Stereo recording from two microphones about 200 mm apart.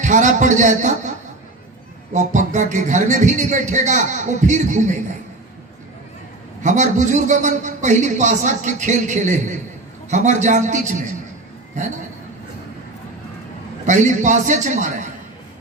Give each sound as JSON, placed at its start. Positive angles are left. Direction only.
{"t": 0.0, "sound": "a man's voice", "side_deg": -40}
{"t": 2.1, "sound": "a man's voice", "side_deg": -35}
{"t": 6.6, "sound": "a man's voice", "side_deg": -35}
{"t": 13.8, "sound": "a man's voice", "side_deg": -40}